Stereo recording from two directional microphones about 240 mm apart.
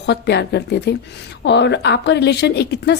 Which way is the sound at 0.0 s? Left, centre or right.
Left.